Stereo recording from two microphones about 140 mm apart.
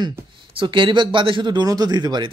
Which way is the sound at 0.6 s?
35° right (ahead or behind).